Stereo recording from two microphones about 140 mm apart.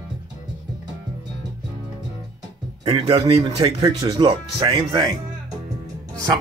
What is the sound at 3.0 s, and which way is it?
Speech, 45° right (ahead or behind).